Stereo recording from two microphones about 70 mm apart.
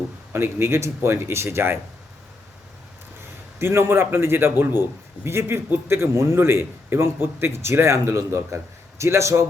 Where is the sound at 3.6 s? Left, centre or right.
Right.